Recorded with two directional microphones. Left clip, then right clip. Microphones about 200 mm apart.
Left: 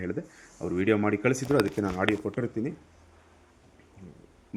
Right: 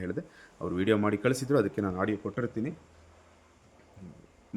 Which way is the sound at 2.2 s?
10° left (ahead or behind).